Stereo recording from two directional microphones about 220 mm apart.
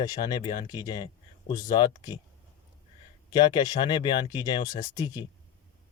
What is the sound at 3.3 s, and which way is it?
Speech, 20° left (ahead or behind).